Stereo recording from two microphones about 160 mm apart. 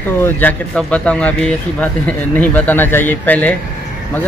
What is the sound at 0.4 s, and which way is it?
Speech, 10° left (ahead or behind).